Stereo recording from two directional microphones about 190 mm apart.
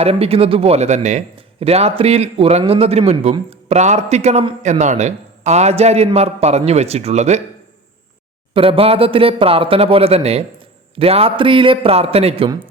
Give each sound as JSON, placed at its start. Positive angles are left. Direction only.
{"t": 0.0, "sound": "a man's voice", "side_deg": -30}
{"t": 8.5, "sound": "a man's voice", "side_deg": -30}